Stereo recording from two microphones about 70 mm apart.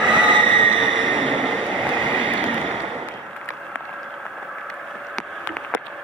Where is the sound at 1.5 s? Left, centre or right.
Centre.